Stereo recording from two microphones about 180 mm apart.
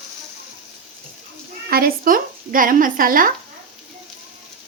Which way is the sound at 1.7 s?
55° right (ahead or behind).